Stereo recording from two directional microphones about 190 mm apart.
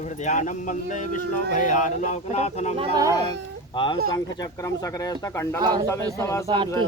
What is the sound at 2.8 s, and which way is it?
Speech, 20° right (ahead or behind).